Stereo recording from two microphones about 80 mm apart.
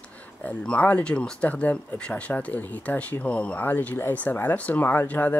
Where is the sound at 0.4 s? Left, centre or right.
Centre.